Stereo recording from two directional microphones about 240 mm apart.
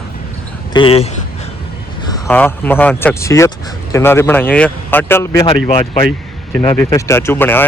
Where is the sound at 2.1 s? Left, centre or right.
Centre.